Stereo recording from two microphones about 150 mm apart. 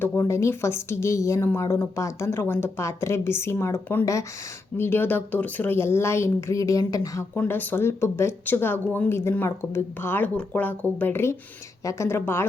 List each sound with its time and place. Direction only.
0.0 s speech: 15° left (ahead or behind)